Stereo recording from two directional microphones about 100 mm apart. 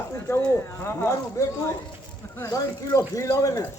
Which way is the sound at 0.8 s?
25° left (ahead or behind).